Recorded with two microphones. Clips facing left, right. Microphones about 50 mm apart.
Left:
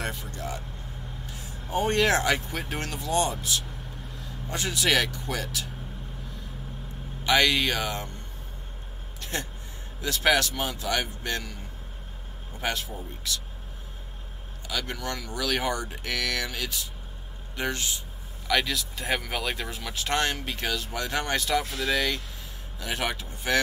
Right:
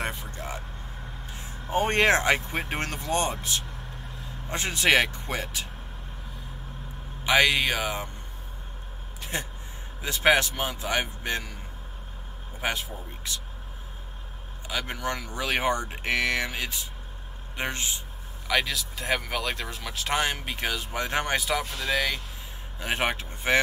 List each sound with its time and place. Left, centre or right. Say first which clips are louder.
0.0 s vehicle: right 1 dB; right
1.3 s speech: right 2 dB; right
7.2 s speech: right 1 dB; centre
9.2 s a sound: even; right
10.0 s speech: right 2 dB; right
12.6 s speech: even; right
14.7 s speech: right 2 dB; right
18.5 s speech: even; centre; by 21.4 s right
21.4 s speech: left 2 dB; centre
22.8 s speech: right 3 dB; right